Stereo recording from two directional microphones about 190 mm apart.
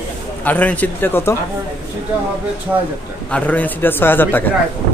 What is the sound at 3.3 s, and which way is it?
A man's voice, 10° left (ahead or behind).